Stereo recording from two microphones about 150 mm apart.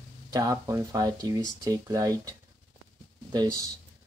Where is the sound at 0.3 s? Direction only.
25° right (ahead or behind).